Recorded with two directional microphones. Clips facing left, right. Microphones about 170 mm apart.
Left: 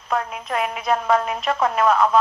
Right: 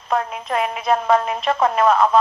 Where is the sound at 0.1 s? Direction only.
30° right (ahead or behind).